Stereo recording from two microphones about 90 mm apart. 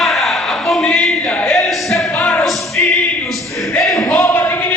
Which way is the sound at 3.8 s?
Centre (ahead or behind).